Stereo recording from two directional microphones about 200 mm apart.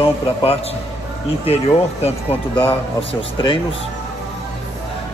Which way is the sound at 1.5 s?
30° left (ahead or behind).